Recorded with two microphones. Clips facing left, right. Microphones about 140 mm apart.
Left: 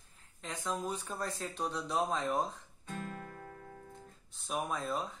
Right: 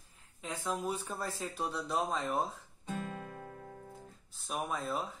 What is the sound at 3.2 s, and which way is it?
Music, 20° right (ahead or behind).